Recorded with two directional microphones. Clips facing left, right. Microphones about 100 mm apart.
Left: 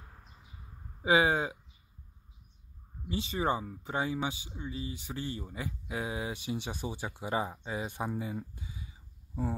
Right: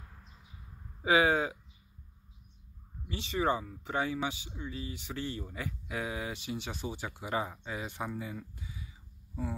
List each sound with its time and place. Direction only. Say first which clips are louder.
1.0 s speech: even; 25° left (ahead or behind)
3.1 s speech: even; 20° left (ahead or behind)
8.2 s a sound: left 3 dB; 25° left (ahead or behind)